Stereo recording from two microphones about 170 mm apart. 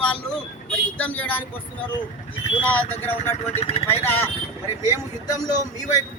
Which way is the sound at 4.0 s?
15° left (ahead or behind).